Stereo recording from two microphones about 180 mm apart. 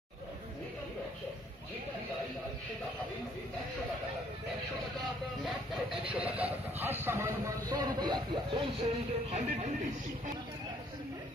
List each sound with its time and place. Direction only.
6.1 s vehicle: 10° right (ahead or behind); by 9.7 s 40° right (ahead or behind)